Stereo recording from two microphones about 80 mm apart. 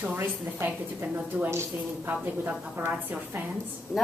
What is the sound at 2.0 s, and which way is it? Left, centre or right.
Speech, right.